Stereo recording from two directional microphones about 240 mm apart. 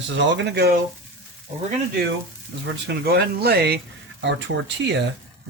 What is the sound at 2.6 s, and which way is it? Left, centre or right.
Speech, right.